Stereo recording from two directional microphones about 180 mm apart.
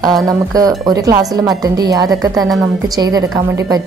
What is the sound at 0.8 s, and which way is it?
Speech, 20° right (ahead or behind).